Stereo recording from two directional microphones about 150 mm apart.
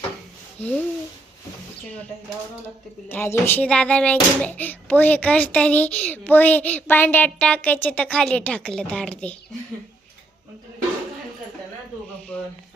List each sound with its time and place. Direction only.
0.6 s speech: 45° left (ahead or behind)
3.1 s speech: 15° left (ahead or behind)